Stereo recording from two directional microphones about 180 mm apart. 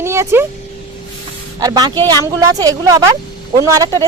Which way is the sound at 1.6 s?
20° right (ahead or behind).